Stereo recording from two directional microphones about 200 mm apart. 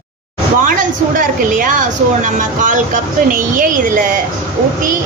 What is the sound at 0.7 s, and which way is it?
A woman's voice, 45° right (ahead or behind).